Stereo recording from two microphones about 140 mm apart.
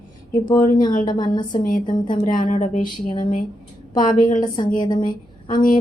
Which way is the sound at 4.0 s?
75° left (ahead or behind).